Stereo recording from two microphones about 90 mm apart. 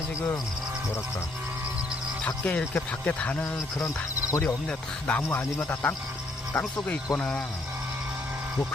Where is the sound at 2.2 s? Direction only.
15° left (ahead or behind).